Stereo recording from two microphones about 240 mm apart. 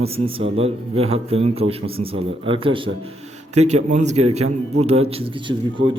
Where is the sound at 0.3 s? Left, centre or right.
Right.